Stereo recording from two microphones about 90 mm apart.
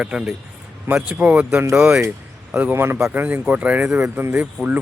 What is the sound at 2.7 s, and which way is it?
Speech, 30° right (ahead or behind).